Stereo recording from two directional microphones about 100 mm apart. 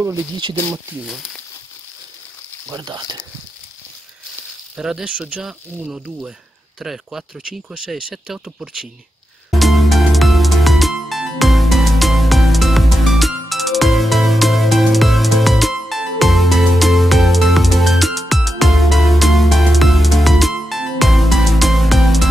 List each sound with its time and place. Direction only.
1.0 s speech: centre (ahead or behind)
2.7 s speech: 45° right (ahead or behind)
4.7 s speech: 5° right (ahead or behind)
9.5 s music: centre (ahead or behind)